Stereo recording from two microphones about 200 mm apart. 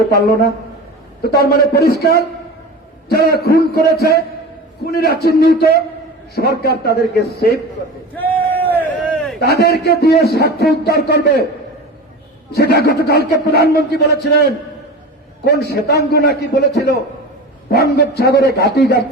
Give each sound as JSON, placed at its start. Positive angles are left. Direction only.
{"t": 1.2, "sound": "a man's voice", "side_deg": 50}
{"t": 8.1, "sound": "a sound", "side_deg": 10}
{"t": 9.4, "sound": "a man's voice", "side_deg": 50}
{"t": 12.5, "sound": "a man's voice", "side_deg": 50}
{"t": 15.4, "sound": "a man's voice", "side_deg": 55}